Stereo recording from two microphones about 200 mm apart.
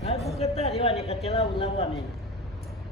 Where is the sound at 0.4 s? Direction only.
30° left (ahead or behind).